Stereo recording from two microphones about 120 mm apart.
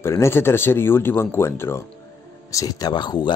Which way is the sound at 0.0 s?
20° left (ahead or behind).